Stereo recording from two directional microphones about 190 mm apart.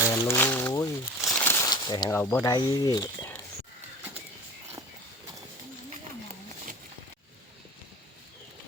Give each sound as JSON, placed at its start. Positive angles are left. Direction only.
{"t": 0.1, "sound": "boat", "side_deg": 15}
{"t": 1.2, "sound": "crumpling", "side_deg": 0}
{"t": 1.5, "sound": "speech", "side_deg": 15}